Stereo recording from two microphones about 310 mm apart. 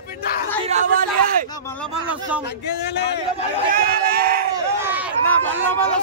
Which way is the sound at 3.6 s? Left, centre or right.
Right.